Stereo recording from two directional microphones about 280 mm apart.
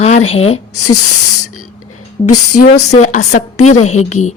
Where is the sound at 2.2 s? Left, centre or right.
Left.